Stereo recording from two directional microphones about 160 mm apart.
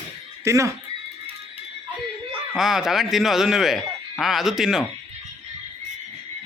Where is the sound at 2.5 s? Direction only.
Centre (ahead or behind).